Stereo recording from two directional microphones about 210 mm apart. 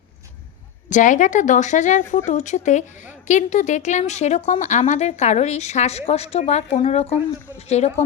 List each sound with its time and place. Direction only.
0.9 s a woman's voice: 35° left (ahead or behind)